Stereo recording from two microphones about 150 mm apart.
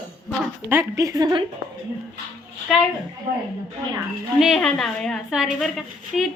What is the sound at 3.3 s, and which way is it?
Speech, 65° right (ahead or behind).